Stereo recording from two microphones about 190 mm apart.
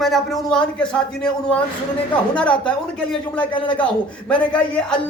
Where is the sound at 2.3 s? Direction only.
5° left (ahead or behind).